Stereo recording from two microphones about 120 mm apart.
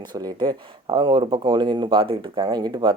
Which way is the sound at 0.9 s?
45° right (ahead or behind).